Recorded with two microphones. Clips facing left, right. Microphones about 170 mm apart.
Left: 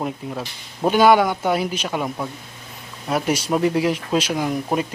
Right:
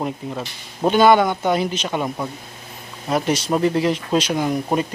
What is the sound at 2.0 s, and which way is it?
Speech, 5° right (ahead or behind).